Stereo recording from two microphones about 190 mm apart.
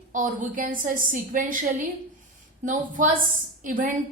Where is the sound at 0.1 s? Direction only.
45° right (ahead or behind).